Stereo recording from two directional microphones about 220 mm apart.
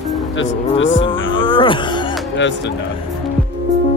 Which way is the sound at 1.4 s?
20° left (ahead or behind).